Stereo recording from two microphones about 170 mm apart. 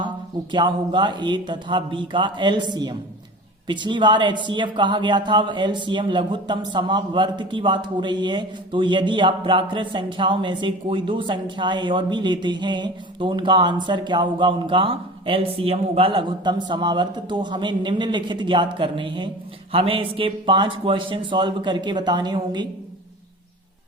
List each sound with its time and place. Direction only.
0.5 s speech: 25° right (ahead or behind)
3.7 s speech: 25° right (ahead or behind)